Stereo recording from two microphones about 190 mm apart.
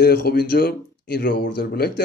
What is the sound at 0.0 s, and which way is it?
Speech, 55° left (ahead or behind).